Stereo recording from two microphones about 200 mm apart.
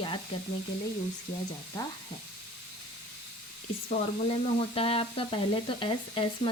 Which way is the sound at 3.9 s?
30° left (ahead or behind).